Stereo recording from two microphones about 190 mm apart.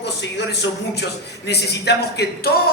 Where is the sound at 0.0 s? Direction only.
65° left (ahead or behind).